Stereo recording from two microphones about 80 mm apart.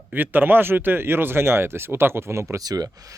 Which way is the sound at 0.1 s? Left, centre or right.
Right.